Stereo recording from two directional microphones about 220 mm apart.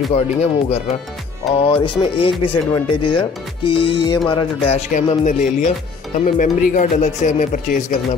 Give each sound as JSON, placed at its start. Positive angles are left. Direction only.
{"t": 0.1, "sound": "speech", "side_deg": 30}